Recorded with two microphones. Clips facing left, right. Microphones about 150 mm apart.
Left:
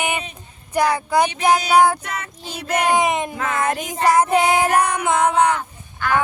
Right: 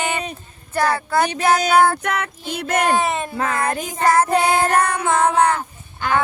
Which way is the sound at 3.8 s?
15° left (ahead or behind).